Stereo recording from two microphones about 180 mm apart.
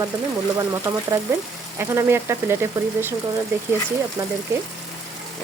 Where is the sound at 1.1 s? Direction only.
15° right (ahead or behind).